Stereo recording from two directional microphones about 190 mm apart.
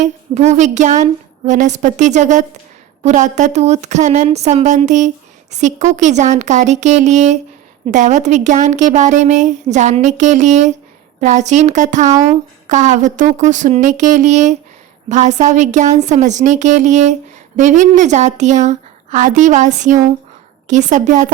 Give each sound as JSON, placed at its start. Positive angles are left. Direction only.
{"t": 0.0, "sound": "a woman's voice", "side_deg": -40}